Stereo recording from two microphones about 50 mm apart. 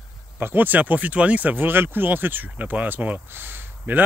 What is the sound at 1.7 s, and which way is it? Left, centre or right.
Speech, right.